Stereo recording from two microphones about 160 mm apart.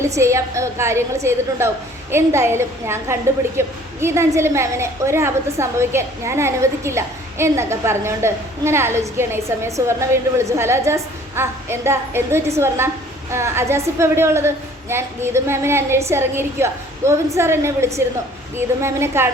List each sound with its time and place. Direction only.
0.0 s a woman's voice: 15° right (ahead or behind)